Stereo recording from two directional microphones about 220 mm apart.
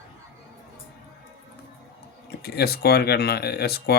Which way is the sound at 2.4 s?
45° left (ahead or behind).